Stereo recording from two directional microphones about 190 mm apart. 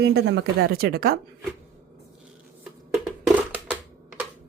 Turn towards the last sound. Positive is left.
turn(degrees=-10)  # may be behind; listen again after turning